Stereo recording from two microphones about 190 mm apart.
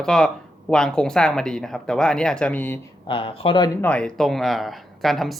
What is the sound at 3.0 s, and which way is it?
Speech, 25° left (ahead or behind).